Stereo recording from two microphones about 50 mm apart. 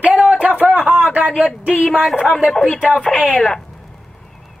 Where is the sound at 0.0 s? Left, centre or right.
Right.